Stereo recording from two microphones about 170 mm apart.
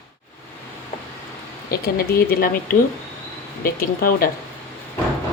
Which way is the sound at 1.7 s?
65° left (ahead or behind).